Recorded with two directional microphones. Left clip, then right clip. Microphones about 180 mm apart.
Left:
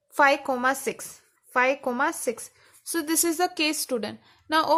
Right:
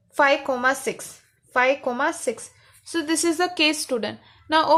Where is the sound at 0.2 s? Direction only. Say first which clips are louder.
Right 2 dB; 40° left (ahead or behind).